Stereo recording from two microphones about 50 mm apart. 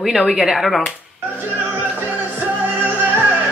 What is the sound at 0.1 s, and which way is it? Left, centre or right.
Speech, centre.